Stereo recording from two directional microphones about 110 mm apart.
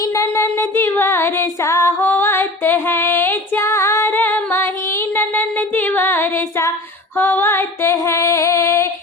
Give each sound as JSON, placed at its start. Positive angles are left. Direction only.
{"t": 0.0, "sound": "female singing", "side_deg": 25}